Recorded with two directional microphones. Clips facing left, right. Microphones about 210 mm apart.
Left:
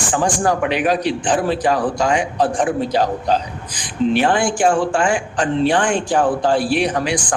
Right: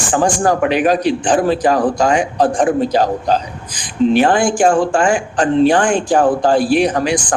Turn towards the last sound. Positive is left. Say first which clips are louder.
# right 4 dB
turn(degrees=-45)  # may be behind; listen again after turning